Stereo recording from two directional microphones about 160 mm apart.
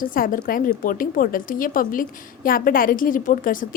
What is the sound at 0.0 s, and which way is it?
A woman's voice, 60° left (ahead or behind).